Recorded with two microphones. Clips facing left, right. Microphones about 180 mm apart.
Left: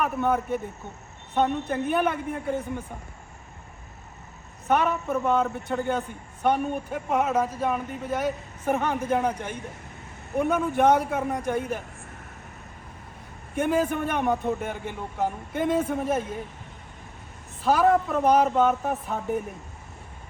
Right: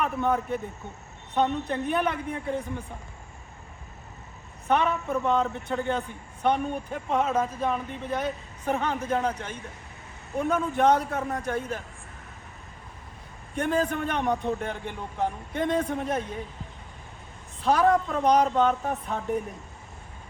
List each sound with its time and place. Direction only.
0.0 s a man's voice: 5° left (ahead or behind)
4.7 s a man's voice: 5° left (ahead or behind)
13.6 s a man's voice: 5° left (ahead or behind)
17.6 s a man's voice: centre (ahead or behind)